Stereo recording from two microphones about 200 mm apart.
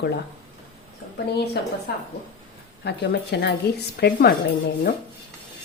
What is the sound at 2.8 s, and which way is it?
A woman's voice, 55° left (ahead or behind).